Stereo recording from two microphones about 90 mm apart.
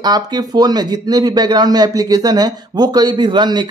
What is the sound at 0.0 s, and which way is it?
A man's voice, 50° right (ahead or behind).